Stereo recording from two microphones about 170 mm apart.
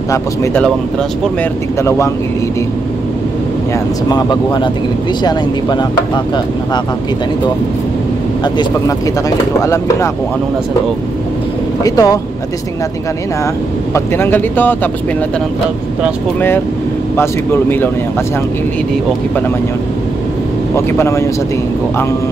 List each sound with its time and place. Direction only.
1.8 s speech: 15° left (ahead or behind)
4.1 s speech: 25° left (ahead or behind)
9.6 s speech: 20° left (ahead or behind)
11.8 s speech: 20° left (ahead or behind)
13.9 s speech: 15° left (ahead or behind)
16.3 s speech: 15° left (ahead or behind)
20.7 s speech: 15° left (ahead or behind)